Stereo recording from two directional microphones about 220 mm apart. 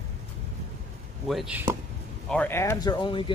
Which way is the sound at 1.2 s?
5° right (ahead or behind).